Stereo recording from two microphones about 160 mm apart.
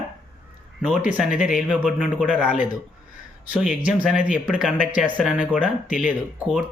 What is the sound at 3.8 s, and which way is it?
Speech, 5° right (ahead or behind).